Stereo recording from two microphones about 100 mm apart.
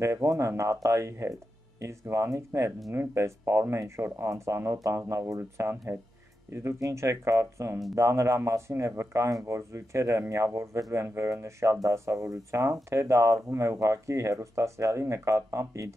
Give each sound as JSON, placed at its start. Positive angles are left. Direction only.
{"t": 0.0, "sound": "speech", "side_deg": -30}